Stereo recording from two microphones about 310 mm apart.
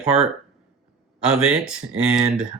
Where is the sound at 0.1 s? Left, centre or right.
Right.